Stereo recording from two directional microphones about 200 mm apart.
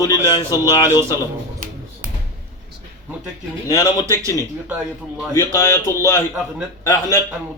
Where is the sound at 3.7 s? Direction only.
20° left (ahead or behind).